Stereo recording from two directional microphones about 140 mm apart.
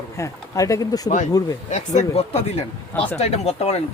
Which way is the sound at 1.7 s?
55° left (ahead or behind).